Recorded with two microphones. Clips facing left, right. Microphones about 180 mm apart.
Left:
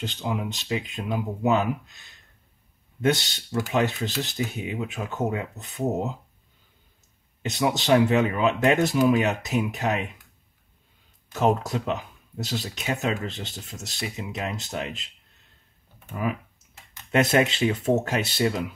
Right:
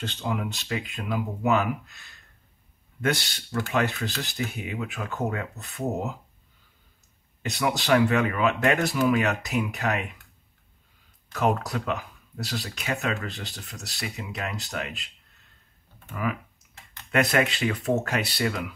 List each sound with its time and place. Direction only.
0.0 s speech: 15° left (ahead or behind)
7.4 s speech: 20° left (ahead or behind)
11.3 s speech: 25° left (ahead or behind)
16.1 s speech: 25° left (ahead or behind)